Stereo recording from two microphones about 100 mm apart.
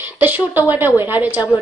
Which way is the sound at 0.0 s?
20° right (ahead or behind).